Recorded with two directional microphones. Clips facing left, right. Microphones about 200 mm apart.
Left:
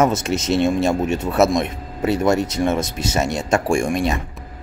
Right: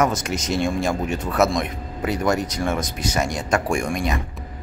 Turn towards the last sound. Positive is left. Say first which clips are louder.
# left 4 dB
turn(degrees=25)  # may be behind; listen again after turning